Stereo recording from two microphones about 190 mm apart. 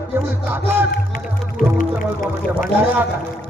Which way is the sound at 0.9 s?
45° left (ahead or behind).